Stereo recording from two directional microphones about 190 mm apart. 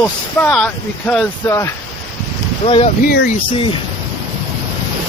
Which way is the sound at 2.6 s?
30° left (ahead or behind).